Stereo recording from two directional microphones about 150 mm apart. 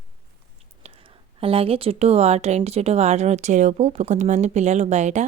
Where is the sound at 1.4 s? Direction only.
40° right (ahead or behind).